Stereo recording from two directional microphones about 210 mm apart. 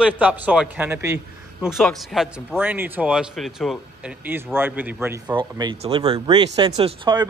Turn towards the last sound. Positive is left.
turn(degrees=-20)  # may be behind; listen again after turning